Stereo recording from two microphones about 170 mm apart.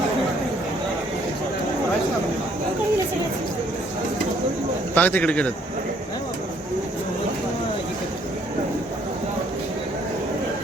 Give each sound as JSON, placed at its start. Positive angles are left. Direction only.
{"t": 4.9, "sound": "speech", "side_deg": 10}